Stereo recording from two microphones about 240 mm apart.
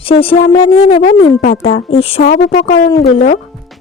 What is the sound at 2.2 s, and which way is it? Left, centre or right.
Speech, left.